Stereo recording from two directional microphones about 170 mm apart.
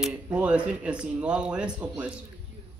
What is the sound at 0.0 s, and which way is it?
Speech, 5° right (ahead or behind).